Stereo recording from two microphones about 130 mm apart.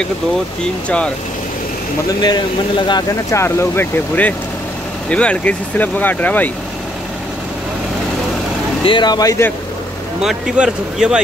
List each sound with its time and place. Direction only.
0.8 s speech: 10° left (ahead or behind)
2.2 s speech: 35° left (ahead or behind)
3.3 s speech: 20° left (ahead or behind)
8.8 s speech: 35° left (ahead or behind)
10.2 s speech: 5° right (ahead or behind)